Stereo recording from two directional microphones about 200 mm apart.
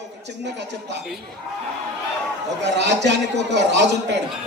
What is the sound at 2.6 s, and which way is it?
A man's voice, 60° right (ahead or behind).